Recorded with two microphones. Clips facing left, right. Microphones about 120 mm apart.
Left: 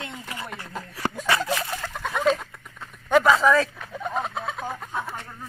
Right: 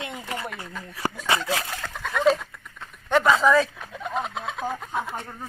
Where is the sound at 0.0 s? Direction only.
20° right (ahead or behind).